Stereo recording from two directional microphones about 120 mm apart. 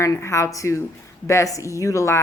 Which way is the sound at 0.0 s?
25° left (ahead or behind).